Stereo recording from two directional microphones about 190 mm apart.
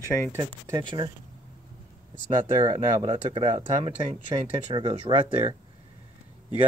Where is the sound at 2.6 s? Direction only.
25° right (ahead or behind).